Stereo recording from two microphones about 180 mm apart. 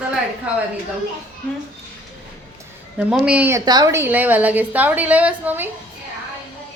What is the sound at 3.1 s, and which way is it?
Speech, 5° right (ahead or behind).